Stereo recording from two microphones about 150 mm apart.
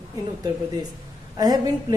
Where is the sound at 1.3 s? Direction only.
25° right (ahead or behind).